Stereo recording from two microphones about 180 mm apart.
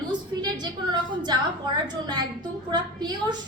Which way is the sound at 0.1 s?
25° right (ahead or behind).